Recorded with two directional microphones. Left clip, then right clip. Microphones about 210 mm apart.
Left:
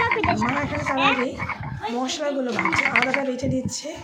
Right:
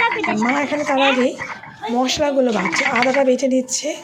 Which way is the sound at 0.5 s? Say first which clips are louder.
Right 6 dB; 40° right (ahead or behind).